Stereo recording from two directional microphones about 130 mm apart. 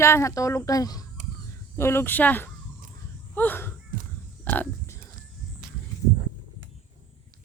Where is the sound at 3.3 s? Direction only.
15° left (ahead or behind).